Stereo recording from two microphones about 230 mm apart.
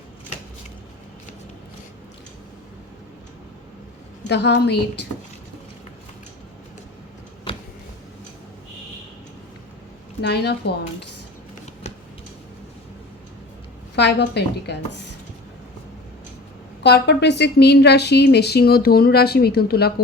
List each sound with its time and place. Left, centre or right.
4.3 s a woman's voice: left
7.5 s a sound: left
10.2 s a woman's voice: left
13.9 s a woman's voice: left
16.8 s a woman's voice: left